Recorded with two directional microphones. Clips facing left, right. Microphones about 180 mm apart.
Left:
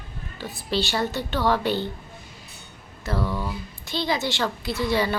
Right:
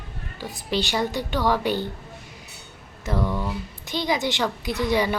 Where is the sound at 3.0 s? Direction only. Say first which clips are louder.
Right 1 dB; 20° right (ahead or behind).